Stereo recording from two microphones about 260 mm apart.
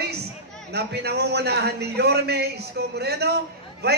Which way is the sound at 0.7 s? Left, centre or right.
Right.